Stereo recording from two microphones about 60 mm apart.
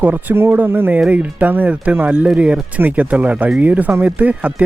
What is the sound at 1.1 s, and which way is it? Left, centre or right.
Speech, right.